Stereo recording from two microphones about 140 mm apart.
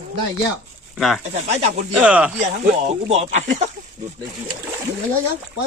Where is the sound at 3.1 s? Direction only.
50° right (ahead or behind).